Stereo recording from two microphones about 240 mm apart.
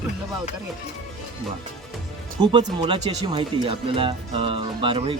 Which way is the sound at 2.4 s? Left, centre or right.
Centre.